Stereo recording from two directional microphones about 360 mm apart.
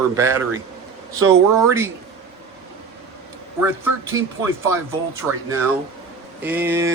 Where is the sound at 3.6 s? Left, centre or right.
Centre.